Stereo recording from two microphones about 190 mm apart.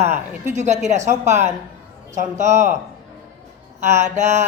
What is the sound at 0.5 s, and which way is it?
Mantra, 40° right (ahead or behind).